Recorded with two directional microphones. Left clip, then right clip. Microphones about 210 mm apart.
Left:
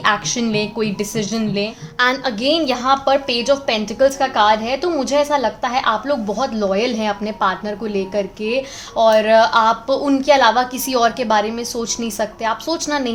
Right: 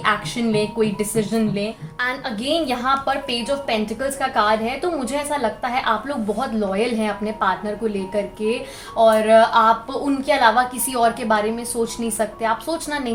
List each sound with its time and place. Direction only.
0.0 s a woman's voice: 40° left (ahead or behind)